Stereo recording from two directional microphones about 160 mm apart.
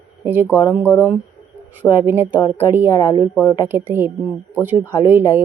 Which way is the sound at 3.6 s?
15° right (ahead or behind).